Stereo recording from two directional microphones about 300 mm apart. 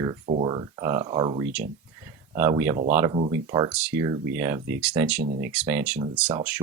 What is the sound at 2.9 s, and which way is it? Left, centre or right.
Speech, centre.